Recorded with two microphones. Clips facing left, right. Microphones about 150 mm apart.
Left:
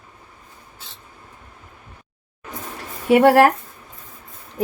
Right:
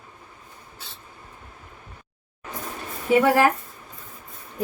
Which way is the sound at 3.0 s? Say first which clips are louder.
Left 5 dB; 75° left (ahead or behind).